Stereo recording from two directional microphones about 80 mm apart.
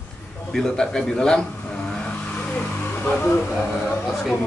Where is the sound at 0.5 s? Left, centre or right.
Centre.